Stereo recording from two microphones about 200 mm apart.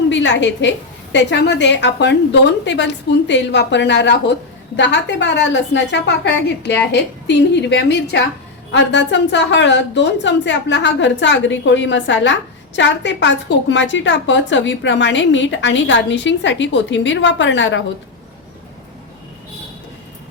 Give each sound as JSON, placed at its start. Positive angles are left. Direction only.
{"t": 0.1, "sound": "a woman's voice", "side_deg": 60}